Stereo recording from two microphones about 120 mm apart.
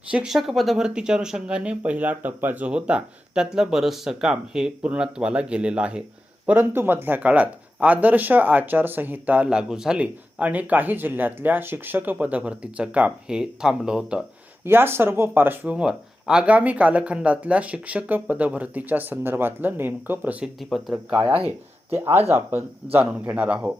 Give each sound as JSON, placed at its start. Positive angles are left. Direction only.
{"t": 0.1, "sound": "speech", "side_deg": -5}
{"t": 14.6, "sound": "speech", "side_deg": -20}
{"t": 20.6, "sound": "speech", "side_deg": 0}
{"t": 21.9, "sound": "speech", "side_deg": -20}